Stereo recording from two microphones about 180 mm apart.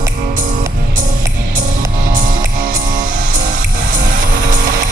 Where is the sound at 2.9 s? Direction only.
50° right (ahead or behind).